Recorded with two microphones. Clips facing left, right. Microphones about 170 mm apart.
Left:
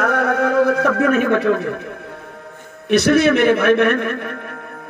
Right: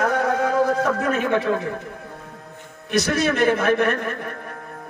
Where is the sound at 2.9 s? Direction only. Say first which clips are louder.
Left 7 dB; 65° left (ahead or behind).